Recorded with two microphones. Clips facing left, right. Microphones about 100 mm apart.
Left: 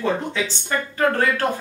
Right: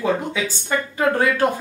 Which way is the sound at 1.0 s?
10° right (ahead or behind).